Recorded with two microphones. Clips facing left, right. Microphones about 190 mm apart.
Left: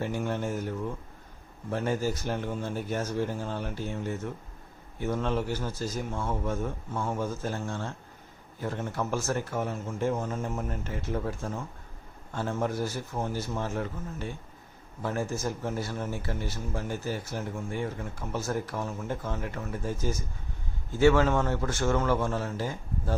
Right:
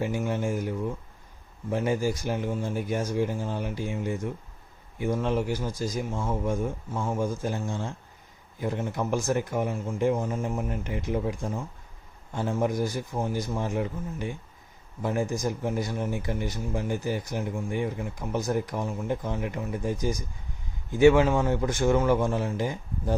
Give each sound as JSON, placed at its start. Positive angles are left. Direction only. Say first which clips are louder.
{"t": 0.0, "sound": "speech", "louder": "right 2 dB", "side_deg": -10}